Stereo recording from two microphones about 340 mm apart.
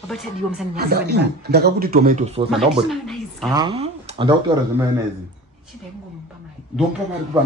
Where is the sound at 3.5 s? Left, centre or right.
Centre.